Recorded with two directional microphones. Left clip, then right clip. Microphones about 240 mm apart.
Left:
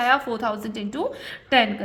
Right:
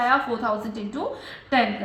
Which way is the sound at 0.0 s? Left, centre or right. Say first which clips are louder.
Left 1 dB; left.